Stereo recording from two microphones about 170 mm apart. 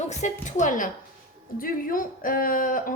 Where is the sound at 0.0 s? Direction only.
40° left (ahead or behind).